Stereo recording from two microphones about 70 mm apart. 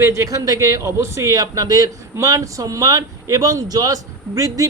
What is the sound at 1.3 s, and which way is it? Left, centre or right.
Speech, right.